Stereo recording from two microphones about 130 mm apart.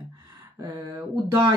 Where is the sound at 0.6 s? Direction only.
30° right (ahead or behind).